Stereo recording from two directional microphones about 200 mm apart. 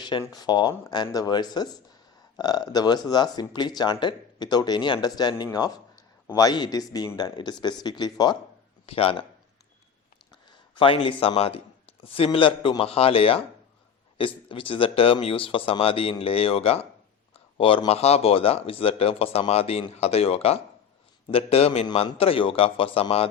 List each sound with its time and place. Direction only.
0.0 s speech: 20° left (ahead or behind)
10.8 s speech: 25° left (ahead or behind)